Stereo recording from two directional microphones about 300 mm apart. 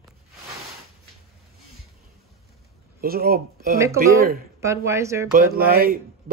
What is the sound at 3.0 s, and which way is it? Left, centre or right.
Speech, right.